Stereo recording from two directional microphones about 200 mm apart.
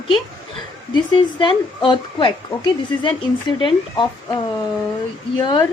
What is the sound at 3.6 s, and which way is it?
Speech, 25° left (ahead or behind).